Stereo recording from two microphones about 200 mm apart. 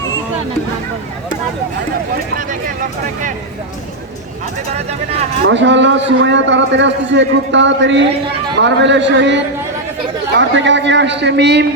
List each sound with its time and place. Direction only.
4.7 s speech: 35° right (ahead or behind)
5.5 s a man's voice: 65° right (ahead or behind)